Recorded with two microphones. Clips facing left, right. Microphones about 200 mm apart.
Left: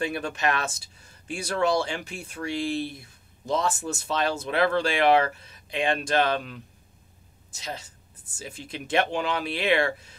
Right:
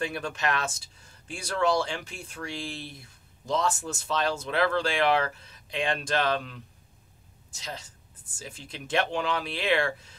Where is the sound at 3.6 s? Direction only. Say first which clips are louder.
Even; 10° left (ahead or behind).